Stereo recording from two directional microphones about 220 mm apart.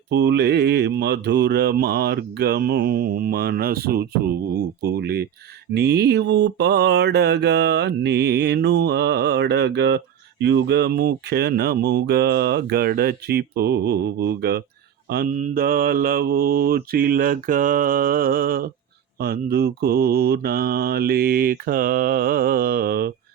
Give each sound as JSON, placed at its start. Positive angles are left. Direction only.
{"t": 0.1, "sound": "speech", "side_deg": -50}
{"t": 15.1, "sound": "mantra", "side_deg": -40}
{"t": 19.2, "sound": "speech", "side_deg": -45}